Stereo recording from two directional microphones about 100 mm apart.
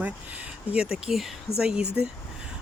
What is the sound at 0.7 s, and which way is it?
Speech, 10° right (ahead or behind).